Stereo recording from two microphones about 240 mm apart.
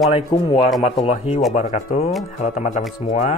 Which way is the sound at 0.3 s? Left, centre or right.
Left.